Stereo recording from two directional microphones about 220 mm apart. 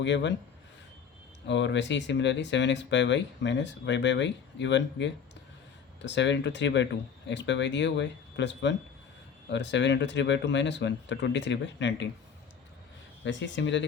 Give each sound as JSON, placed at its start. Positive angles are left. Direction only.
{"t": 0.0, "sound": "speech", "side_deg": 55}
{"t": 1.5, "sound": "speech", "side_deg": 55}
{"t": 13.2, "sound": "speech", "side_deg": 55}